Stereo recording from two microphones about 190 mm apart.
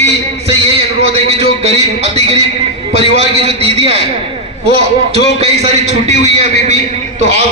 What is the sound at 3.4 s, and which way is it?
Speech, 30° right (ahead or behind).